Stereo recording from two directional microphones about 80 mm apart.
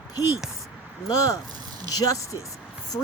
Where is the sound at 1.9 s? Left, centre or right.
Left.